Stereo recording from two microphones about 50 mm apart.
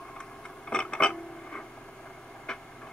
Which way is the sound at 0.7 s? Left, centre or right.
Centre.